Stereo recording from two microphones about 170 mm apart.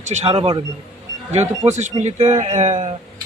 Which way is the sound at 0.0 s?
40° right (ahead or behind).